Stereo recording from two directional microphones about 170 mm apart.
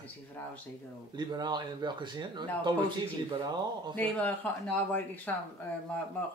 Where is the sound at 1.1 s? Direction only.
25° right (ahead or behind).